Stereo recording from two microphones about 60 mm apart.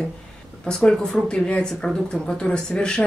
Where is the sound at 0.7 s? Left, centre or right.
Centre.